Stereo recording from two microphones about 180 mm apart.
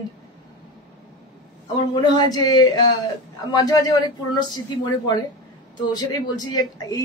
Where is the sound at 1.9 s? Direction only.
25° left (ahead or behind).